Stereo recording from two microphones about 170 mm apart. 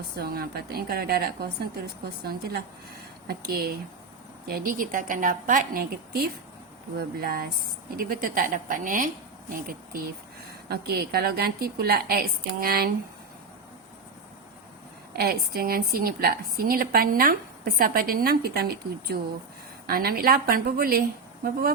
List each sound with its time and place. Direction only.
0.2 s a woman's voice: 65° right (ahead or behind)
15.1 s a woman's voice: 65° right (ahead or behind)